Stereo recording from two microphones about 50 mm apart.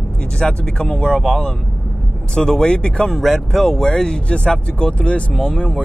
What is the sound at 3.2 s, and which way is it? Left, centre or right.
Speech, centre.